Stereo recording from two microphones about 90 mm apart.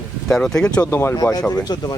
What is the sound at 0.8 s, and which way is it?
Speech, 25° left (ahead or behind).